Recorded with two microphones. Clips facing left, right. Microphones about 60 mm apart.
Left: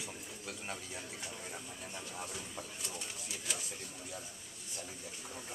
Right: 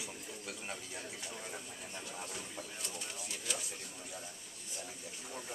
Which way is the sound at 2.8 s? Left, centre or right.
Centre.